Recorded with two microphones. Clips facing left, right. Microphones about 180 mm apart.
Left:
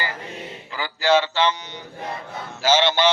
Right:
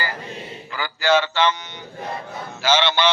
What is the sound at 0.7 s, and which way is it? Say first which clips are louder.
Speech: even; 30° left (ahead or behind).